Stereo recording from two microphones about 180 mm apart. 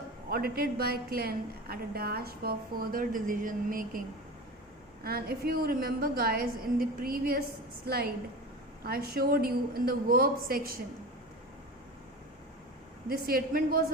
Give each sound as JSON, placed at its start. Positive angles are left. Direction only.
{"t": 0.3, "sound": "a woman's voice", "side_deg": -55}
{"t": 5.0, "sound": "a woman's voice", "side_deg": -60}
{"t": 13.1, "sound": "a woman's voice", "side_deg": -55}